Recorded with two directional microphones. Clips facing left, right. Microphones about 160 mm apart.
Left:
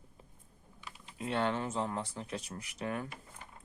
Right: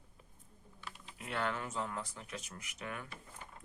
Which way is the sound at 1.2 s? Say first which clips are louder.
Left 5 dB; 25° left (ahead or behind).